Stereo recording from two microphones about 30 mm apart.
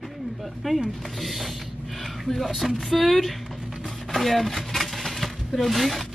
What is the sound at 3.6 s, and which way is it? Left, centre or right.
Chopping, centre.